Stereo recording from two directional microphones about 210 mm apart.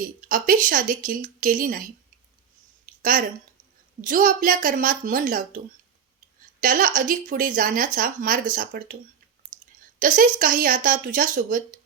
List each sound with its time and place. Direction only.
0.0 s a woman's voice: 40° right (ahead or behind)
3.0 s a woman's voice: 40° right (ahead or behind)
10.0 s a woman's voice: 40° right (ahead or behind)